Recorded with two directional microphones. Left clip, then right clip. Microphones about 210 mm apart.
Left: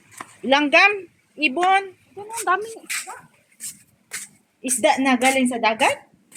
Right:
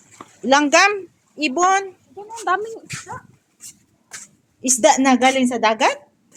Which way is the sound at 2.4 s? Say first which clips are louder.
Right 1 dB; 40° right (ahead or behind).